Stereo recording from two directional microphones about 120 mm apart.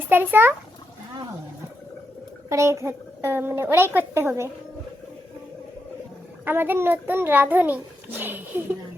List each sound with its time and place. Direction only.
0.1 s a child's voice: 15° right (ahead or behind)
2.5 s a child's voice: 25° right (ahead or behind)
6.4 s a child's voice: 15° right (ahead or behind)